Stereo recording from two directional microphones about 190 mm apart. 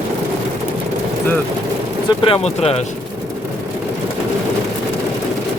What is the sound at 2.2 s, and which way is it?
Speech, 30° left (ahead or behind).